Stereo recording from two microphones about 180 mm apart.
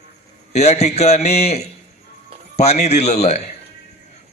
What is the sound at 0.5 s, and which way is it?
A man's voice, 35° left (ahead or behind).